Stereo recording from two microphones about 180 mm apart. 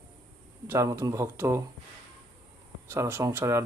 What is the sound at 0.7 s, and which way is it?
Speech, 15° right (ahead or behind).